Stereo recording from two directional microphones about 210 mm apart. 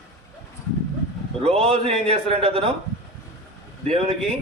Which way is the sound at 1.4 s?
30° right (ahead or behind).